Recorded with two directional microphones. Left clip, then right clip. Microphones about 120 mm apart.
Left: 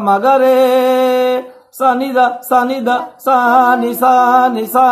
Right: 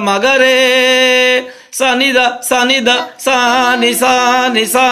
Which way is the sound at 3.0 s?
35° right (ahead or behind).